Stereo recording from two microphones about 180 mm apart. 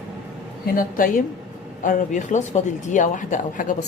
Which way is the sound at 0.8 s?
50° left (ahead or behind).